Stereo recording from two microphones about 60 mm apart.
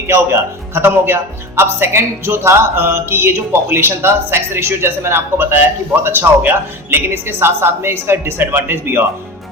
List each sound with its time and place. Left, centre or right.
0.1 s speech: right